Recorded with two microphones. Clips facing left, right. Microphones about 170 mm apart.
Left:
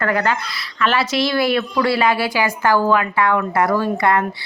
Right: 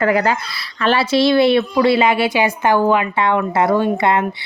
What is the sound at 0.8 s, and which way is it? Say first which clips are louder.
A woman's voice: right 4 dB; 30° right (ahead or behind).